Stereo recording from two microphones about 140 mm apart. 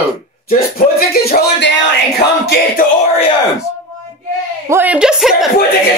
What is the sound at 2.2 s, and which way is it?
Music, 35° left (ahead or behind).